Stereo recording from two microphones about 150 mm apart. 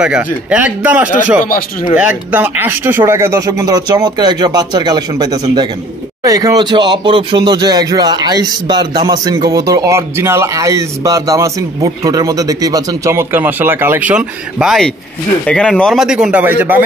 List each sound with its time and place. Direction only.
0.0 s a man's voice: 5° right (ahead or behind)